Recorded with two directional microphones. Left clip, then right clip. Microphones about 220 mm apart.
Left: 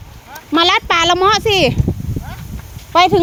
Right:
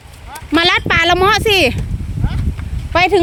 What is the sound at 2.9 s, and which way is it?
Speech, 15° right (ahead or behind).